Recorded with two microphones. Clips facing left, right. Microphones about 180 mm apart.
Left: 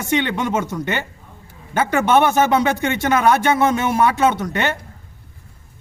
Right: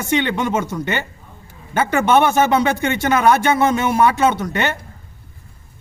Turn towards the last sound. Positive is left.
turn(degrees=0)  # may be behind; listen again after turning